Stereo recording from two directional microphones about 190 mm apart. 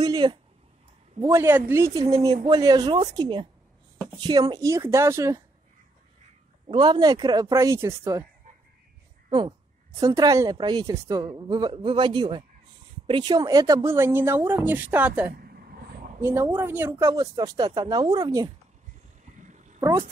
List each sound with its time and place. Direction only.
0.0 s a sound: 25° right (ahead or behind)
1.2 s a woman's voice: 15° right (ahead or behind)
6.7 s a woman's voice: 25° right (ahead or behind)
9.9 s a woman's voice: 20° right (ahead or behind)
15.3 s vehicle: 50° right (ahead or behind)
16.2 s a woman's voice: 15° right (ahead or behind)
19.4 s a sound: 40° right (ahead or behind)
19.8 s speech: 15° right (ahead or behind)